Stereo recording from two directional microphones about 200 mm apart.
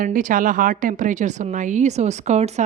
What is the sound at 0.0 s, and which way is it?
A woman's voice, 40° right (ahead or behind).